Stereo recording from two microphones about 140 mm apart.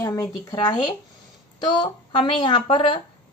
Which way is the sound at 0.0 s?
25° left (ahead or behind).